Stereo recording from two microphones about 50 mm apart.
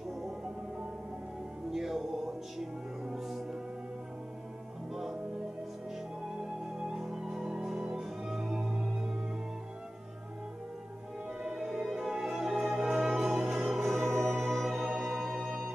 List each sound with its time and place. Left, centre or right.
1.7 s music: centre
6.4 s music: centre
11.4 s music: centre
15.0 s organ: centre